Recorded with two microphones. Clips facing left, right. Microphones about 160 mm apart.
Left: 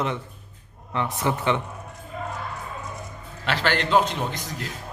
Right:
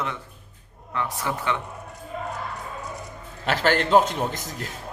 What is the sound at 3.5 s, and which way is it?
A man's voice, 45° right (ahead or behind).